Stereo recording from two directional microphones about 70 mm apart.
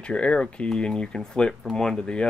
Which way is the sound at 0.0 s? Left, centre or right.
Centre.